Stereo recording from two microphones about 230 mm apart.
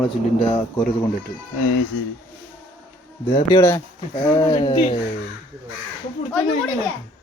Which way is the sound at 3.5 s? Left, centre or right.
Centre.